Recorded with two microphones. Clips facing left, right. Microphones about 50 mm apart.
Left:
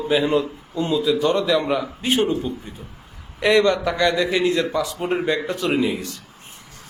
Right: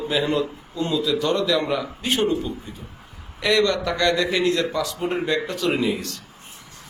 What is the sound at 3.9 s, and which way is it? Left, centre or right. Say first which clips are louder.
Speech: left 1 dB; centre.